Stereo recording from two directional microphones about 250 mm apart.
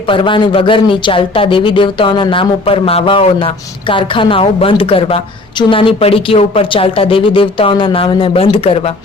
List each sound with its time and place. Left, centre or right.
0.1 s speech: centre